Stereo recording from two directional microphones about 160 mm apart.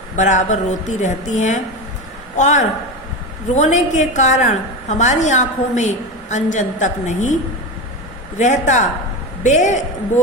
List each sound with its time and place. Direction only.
0.2 s a woman's voice: 50° left (ahead or behind)
8.4 s a woman's voice: 50° left (ahead or behind)